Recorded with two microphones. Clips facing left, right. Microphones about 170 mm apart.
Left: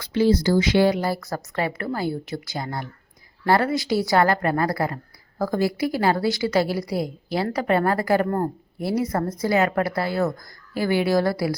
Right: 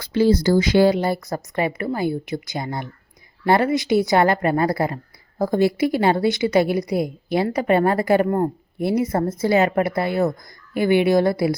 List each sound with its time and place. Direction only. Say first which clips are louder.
0.0 s speech: right 2 dB; 40° right (ahead or behind)
0.9 s speech: right 3 dB; 25° right (ahead or behind)